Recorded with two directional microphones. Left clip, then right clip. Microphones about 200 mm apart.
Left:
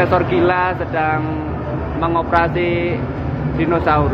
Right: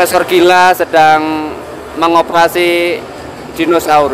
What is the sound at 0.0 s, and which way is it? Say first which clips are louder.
Speech: right 6 dB; 80° right.